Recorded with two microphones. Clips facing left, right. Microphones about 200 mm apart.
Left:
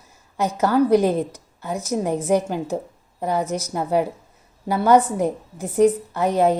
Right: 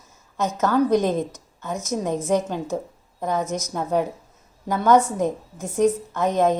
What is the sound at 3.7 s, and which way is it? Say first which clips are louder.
A woman's voice: left 2 dB; 10° left (ahead or behind).